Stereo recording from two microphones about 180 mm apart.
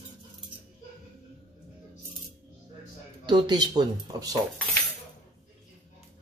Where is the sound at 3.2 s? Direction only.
25° right (ahead or behind).